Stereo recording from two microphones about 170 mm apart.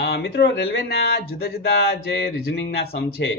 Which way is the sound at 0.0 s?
70° left (ahead or behind).